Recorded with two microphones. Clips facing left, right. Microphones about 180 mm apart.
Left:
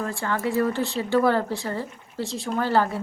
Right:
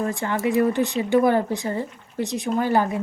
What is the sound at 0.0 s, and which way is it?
Speech, 20° right (ahead or behind).